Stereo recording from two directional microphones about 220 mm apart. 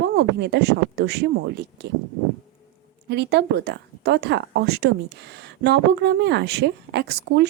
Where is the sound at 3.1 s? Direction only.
50° right (ahead or behind).